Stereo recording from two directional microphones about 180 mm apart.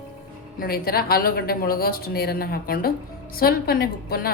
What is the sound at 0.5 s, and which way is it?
A woman's voice, 55° left (ahead or behind).